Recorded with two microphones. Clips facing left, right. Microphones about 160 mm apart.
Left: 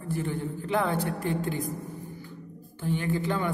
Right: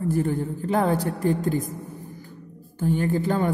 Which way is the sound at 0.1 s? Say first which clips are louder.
Right 3 dB; 40° right (ahead or behind).